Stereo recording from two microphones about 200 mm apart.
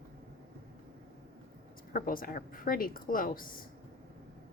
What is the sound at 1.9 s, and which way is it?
A woman's voice, 45° left (ahead or behind).